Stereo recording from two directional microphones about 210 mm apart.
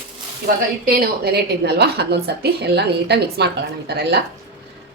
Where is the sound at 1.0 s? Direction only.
50° right (ahead or behind).